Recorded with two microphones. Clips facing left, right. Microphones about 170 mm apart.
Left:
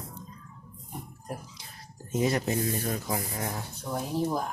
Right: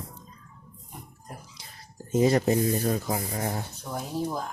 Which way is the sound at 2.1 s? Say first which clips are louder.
Right 5 dB; 30° right (ahead or behind).